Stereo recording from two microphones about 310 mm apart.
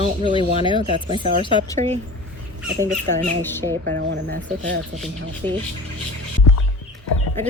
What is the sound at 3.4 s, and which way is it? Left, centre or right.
Speech, centre.